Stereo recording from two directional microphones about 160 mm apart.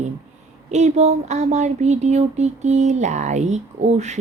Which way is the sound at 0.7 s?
45° right (ahead or behind).